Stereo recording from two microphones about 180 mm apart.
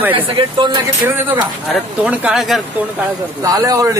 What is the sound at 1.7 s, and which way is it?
Speech, 5° right (ahead or behind).